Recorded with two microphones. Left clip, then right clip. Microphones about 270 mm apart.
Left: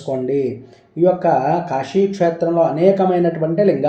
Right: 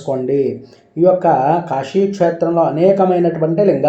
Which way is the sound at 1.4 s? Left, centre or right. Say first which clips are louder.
Right 3 dB; right.